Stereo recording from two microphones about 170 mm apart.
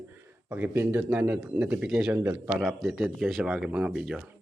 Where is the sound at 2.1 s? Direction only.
15° right (ahead or behind).